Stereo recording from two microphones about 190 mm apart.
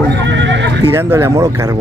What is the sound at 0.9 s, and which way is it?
Speech, 15° right (ahead or behind).